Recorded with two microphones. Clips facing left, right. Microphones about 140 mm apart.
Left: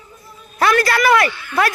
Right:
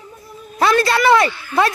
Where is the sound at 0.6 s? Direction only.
25° right (ahead or behind).